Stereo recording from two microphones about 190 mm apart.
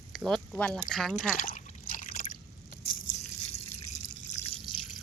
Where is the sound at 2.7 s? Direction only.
60° left (ahead or behind).